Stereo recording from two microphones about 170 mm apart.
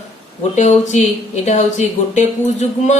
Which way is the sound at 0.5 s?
45° left (ahead or behind).